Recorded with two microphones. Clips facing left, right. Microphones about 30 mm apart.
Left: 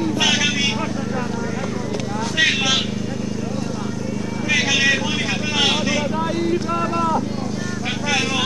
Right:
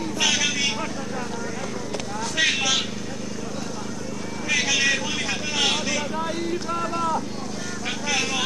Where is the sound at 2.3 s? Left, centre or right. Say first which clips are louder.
Left 4 dB; centre.